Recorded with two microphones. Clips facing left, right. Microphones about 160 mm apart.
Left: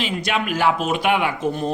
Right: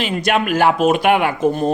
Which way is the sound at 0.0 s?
55° right (ahead or behind).